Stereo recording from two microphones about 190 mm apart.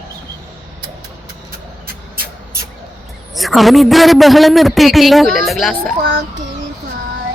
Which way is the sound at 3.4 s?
Centre (ahead or behind).